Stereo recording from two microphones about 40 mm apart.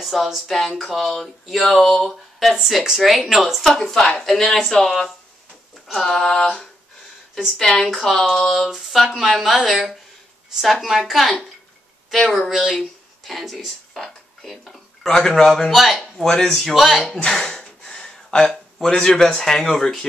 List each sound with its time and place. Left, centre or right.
0.0 s speech: centre
2.5 s speech: centre
3.6 s speech: centre
8.6 s speech: centre
15.0 s speech: centre
15.7 s speech: centre
16.0 s speech: centre
16.7 s speech: centre
17.3 s a sound: centre
18.9 s speech: centre